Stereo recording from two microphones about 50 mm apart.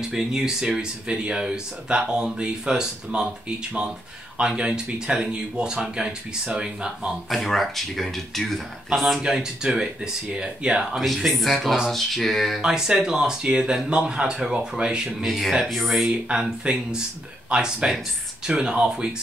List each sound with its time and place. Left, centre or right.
0.1 s speech: centre
7.2 s speech: centre
9.2 s speech: centre
11.1 s speech: centre
12.6 s a man's voice: centre
15.0 s speech: centre
16.1 s speech: centre